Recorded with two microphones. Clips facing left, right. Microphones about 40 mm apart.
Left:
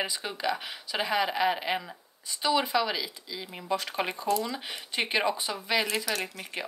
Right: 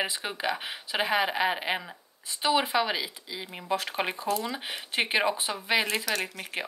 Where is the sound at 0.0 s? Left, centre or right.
Right.